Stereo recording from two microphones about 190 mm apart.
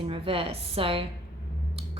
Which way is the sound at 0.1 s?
30° right (ahead or behind).